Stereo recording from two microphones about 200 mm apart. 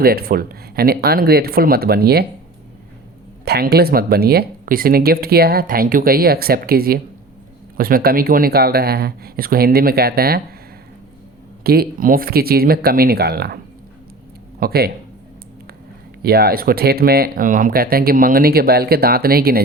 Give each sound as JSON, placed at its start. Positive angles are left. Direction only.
{"t": 0.0, "sound": "speech", "side_deg": -50}
{"t": 3.4, "sound": "speech", "side_deg": -50}
{"t": 11.6, "sound": "speech", "side_deg": -50}
{"t": 14.6, "sound": "speech", "side_deg": -50}
{"t": 16.2, "sound": "speech", "side_deg": -50}